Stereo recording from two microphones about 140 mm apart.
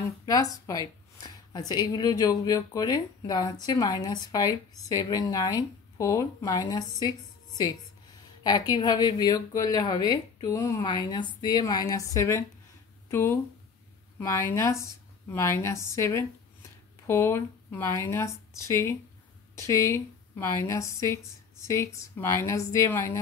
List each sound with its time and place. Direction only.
0.2 s a woman's voice: 25° left (ahead or behind)